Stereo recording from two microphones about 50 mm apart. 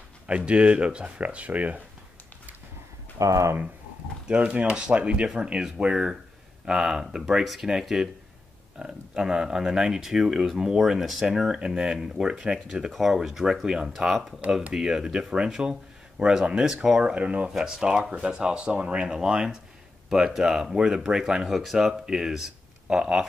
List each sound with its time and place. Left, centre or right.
0.3 s speech: right
3.2 s speech: right
4.3 s speech: right
12.9 s speech: centre